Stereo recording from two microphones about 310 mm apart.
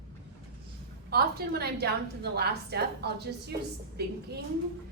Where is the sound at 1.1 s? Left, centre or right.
Right.